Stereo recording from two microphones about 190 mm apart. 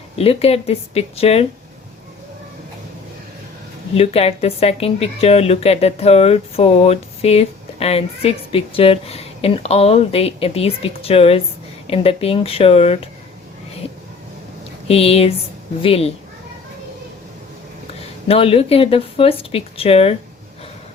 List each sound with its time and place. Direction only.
0.2 s a woman's voice: 30° left (ahead or behind)
3.9 s a woman's voice: 30° left (ahead or behind)
14.8 s a woman's voice: 30° left (ahead or behind)
18.3 s a woman's voice: 30° left (ahead or behind)